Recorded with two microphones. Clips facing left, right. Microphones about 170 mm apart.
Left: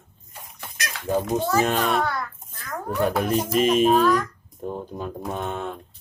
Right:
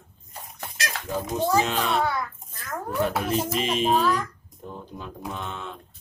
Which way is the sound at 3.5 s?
50° left (ahead or behind).